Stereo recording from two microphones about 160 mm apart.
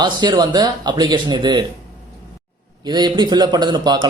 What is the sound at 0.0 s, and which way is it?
A man's voice, 25° right (ahead or behind).